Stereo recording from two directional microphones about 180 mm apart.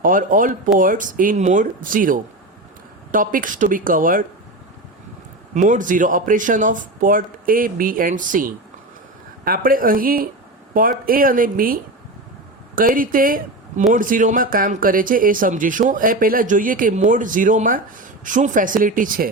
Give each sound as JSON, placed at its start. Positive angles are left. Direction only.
{"t": 0.0, "sound": "speech", "side_deg": -50}
{"t": 5.5, "sound": "speech", "side_deg": -45}